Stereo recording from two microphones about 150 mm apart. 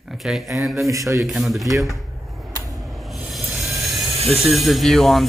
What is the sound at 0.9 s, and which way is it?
Speech, 20° right (ahead or behind).